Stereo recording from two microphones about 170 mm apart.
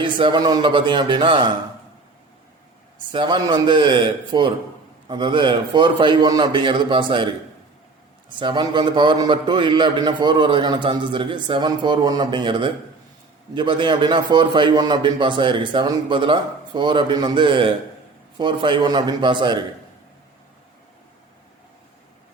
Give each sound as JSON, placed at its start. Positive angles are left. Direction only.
{"t": 0.0, "sound": "a man's voice", "side_deg": -30}
{"t": 3.1, "sound": "a man's voice", "side_deg": -25}
{"t": 8.4, "sound": "a man's voice", "side_deg": -30}